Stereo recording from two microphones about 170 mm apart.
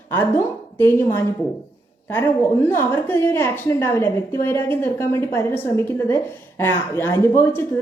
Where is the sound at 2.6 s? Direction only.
10° left (ahead or behind).